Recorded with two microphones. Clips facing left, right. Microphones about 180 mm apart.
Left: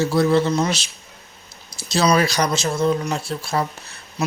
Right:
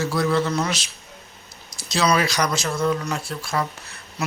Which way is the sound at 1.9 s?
35° left (ahead or behind).